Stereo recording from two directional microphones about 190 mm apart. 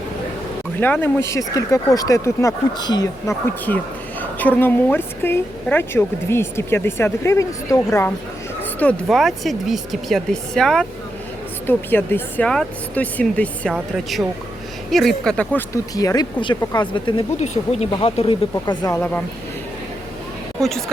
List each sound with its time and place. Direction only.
0.8 s a woman's voice: 10° left (ahead or behind)
8.8 s a woman's voice: 5° left (ahead or behind); by 18.9 s 20° left (ahead or behind)
18.9 s a woman's voice: 10° left (ahead or behind)
20.6 s speech: centre (ahead or behind)